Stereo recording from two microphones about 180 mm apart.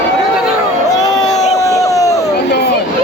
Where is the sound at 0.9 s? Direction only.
20° left (ahead or behind).